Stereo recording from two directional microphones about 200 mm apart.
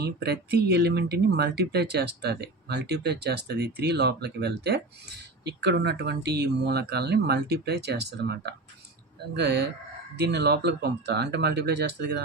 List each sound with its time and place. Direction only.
0.0 s speech: 55° right (ahead or behind)